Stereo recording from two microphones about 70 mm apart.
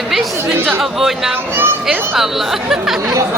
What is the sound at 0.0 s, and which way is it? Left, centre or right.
Chatter, centre.